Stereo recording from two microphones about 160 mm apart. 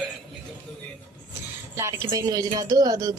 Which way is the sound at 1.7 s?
15° right (ahead or behind).